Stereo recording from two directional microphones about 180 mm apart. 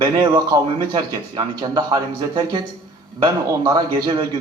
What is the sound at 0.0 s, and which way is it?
A man's voice, 25° right (ahead or behind).